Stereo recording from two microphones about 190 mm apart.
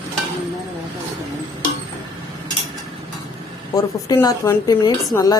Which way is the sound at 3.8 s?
20° left (ahead or behind).